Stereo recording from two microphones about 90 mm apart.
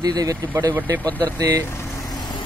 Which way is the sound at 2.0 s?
50° left (ahead or behind).